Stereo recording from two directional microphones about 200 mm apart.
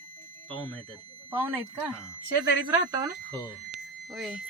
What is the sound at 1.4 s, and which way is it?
Speech, 10° right (ahead or behind).